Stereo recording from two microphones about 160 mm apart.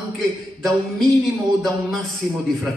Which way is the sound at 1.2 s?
Centre (ahead or behind).